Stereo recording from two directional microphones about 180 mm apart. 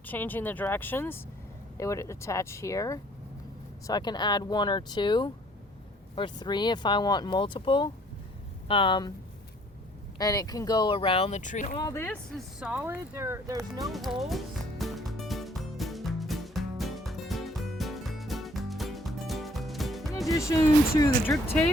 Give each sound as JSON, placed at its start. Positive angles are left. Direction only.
{"t": 0.0, "sound": "speech", "side_deg": 10}
{"t": 10.2, "sound": "speech", "side_deg": 20}
{"t": 11.8, "sound": "speech", "side_deg": 15}
{"t": 12.5, "sound": "speech", "side_deg": -5}
{"t": 13.8, "sound": "music", "side_deg": 0}
{"t": 20.2, "sound": "speech", "side_deg": 20}